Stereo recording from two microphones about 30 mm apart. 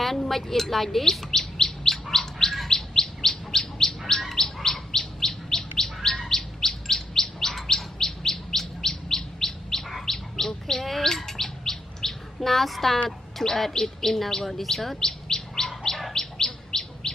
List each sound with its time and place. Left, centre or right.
0.0 s chirp: centre
2.5 s bird: centre
2.9 s chirp: centre
9.8 s bird: centre
10.1 s chirp: centre
13.4 s bird: centre
14.6 s speech: centre
15.0 s bird: centre
16.1 s chirp: centre